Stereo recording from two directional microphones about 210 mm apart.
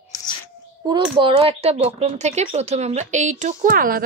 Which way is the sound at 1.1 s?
25° right (ahead or behind).